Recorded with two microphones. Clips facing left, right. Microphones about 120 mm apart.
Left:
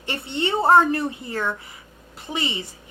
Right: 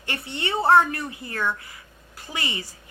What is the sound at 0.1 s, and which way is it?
A woman's voice, 25° left (ahead or behind).